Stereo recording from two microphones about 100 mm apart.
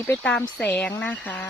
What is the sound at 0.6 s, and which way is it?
Speech, 10° left (ahead or behind).